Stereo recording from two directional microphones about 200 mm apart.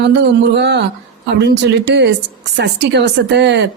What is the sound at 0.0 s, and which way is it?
A woman's voice, 60° right (ahead or behind).